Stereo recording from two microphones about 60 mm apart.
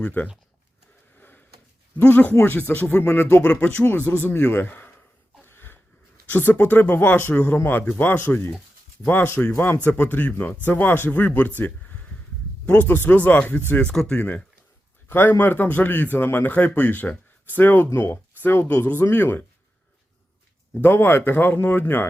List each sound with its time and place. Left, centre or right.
0.0 s speech: left
2.0 s speech: left
5.5 s a sound: left
6.3 s speech: left
13.9 s speech: centre
14.2 s speech: left
15.1 s speech: left
20.8 s speech: left